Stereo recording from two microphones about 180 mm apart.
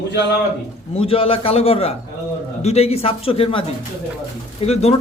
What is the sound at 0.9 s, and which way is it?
A man's voice, 30° left (ahead or behind).